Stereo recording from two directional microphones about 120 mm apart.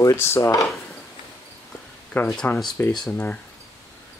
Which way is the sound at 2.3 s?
5° left (ahead or behind).